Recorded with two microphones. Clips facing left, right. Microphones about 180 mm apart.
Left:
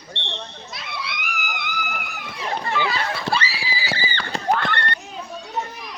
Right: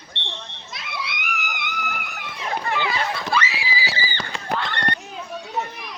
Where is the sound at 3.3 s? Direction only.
30° left (ahead or behind).